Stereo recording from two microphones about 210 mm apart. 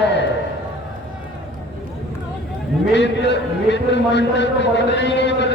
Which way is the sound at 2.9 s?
55° left (ahead or behind).